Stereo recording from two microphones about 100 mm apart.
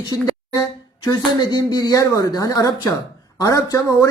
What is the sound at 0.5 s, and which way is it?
Speech, 40° left (ahead or behind).